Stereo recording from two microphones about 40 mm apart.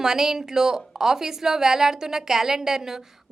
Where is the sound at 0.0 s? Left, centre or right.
Centre.